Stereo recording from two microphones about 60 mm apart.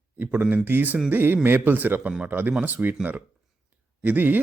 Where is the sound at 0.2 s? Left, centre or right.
Right.